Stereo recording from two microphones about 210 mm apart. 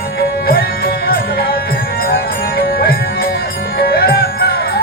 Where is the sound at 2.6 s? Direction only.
45° left (ahead or behind).